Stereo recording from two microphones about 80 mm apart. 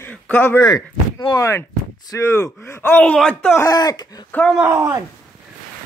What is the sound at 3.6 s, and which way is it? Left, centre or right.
Speech, left.